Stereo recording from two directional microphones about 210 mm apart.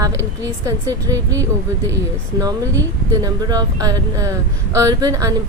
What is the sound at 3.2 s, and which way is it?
Speech, 20° right (ahead or behind).